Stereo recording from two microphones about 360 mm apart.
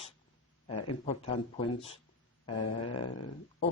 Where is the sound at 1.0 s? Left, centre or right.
Centre.